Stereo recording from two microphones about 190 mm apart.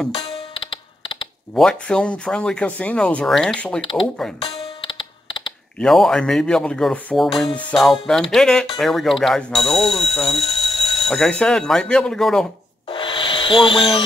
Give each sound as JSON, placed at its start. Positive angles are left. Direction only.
{"t": 0.1, "sound": "music", "side_deg": 30}
{"t": 1.5, "sound": "speech", "side_deg": 5}
{"t": 4.4, "sound": "music", "side_deg": 30}
{"t": 5.8, "sound": "speech", "side_deg": 0}
{"t": 12.8, "sound": "rub", "side_deg": 25}